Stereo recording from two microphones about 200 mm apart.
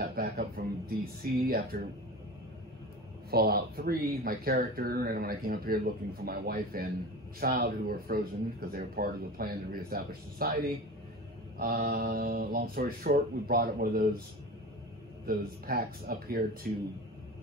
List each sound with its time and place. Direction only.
0.0 s a sound: 50° right (ahead or behind)
3.3 s speech: 50° right (ahead or behind)
15.2 s speech: 50° right (ahead or behind)